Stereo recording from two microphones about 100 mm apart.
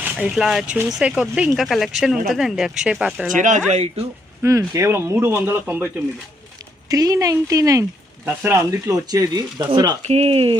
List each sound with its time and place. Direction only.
0.2 s speech: 5° right (ahead or behind)
3.7 s speech: 90° right
4.4 s speech: 30° right (ahead or behind)
6.8 s speech: 35° right (ahead or behind)
9.0 s speech: 40° right (ahead or behind)
10.1 s speech: 90° right